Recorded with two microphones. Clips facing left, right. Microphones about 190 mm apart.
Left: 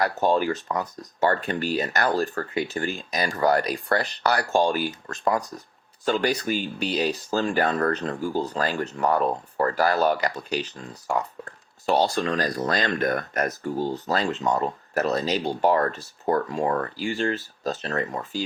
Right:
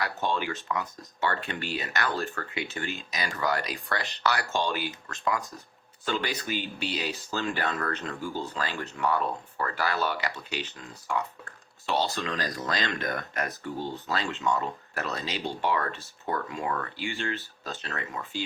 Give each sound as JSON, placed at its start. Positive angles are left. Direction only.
{"t": 0.0, "sound": "speech", "side_deg": 40}